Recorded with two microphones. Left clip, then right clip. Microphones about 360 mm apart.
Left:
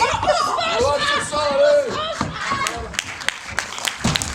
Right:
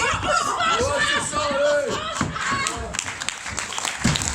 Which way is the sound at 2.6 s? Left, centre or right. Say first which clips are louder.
Left 2 dB; left.